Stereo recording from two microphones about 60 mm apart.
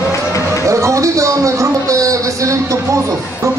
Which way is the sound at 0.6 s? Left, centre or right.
Right.